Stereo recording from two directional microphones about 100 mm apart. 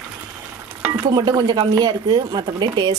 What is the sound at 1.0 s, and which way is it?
Speech, 45° right (ahead or behind).